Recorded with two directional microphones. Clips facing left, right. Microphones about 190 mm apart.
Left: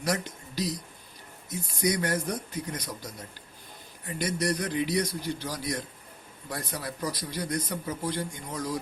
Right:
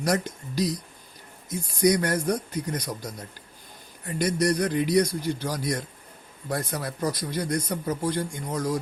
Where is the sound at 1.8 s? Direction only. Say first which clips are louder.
Right 6 dB; 45° right (ahead or behind).